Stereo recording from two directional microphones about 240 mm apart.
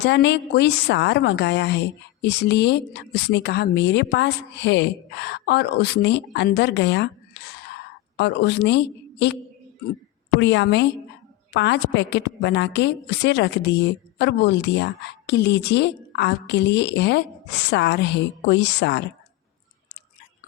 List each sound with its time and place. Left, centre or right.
0.0 s a woman's voice: left
10.4 s a woman's voice: left